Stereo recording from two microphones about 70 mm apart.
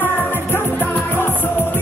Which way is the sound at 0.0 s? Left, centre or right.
Left.